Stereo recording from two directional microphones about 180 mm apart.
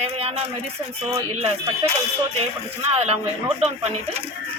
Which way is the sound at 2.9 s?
35° right (ahead or behind).